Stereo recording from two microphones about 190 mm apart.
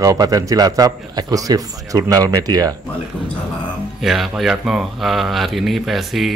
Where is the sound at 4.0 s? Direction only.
Centre (ahead or behind).